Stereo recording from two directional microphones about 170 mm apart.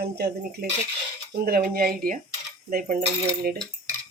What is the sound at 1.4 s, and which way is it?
Speech, 65° right (ahead or behind).